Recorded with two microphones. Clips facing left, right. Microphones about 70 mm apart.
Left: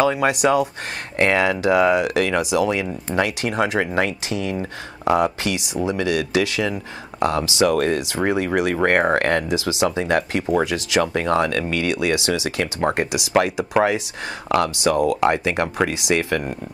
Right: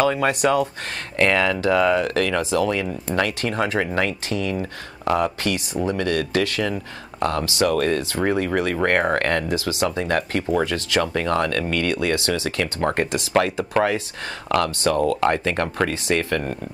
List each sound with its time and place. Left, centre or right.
0.0 s speech: left